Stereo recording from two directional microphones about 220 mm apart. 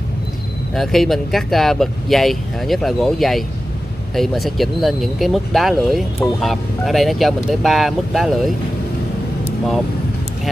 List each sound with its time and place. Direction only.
0.7 s speech: centre (ahead or behind)